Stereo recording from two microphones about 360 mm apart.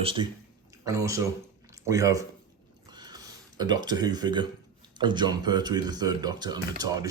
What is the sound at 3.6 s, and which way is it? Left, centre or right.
Speech, centre.